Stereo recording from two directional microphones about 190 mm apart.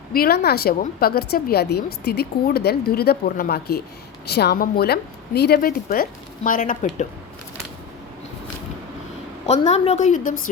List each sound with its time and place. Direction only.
0.1 s a woman's voice: 55° left (ahead or behind)
9.5 s a woman's voice: 35° left (ahead or behind)